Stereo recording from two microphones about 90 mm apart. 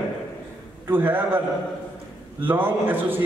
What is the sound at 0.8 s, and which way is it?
Speech, 25° right (ahead or behind).